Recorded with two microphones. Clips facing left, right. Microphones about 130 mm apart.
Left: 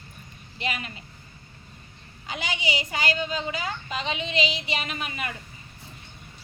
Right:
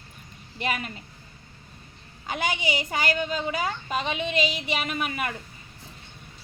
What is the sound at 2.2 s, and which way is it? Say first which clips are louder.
A woman's voice: right 3 dB; 50° right (ahead or behind).